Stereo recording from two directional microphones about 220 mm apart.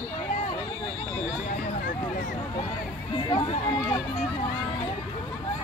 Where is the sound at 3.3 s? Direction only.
20° left (ahead or behind).